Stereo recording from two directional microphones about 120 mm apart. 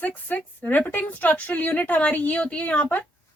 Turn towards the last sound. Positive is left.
turn(degrees=15)  # may be behind; listen again after turning